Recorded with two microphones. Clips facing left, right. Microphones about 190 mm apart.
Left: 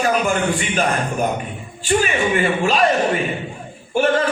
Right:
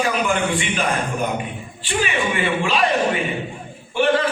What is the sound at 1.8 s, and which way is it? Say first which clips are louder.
Speech: left 5 dB; 45° left (ahead or behind).